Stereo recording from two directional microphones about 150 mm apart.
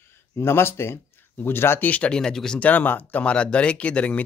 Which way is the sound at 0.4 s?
15° left (ahead or behind).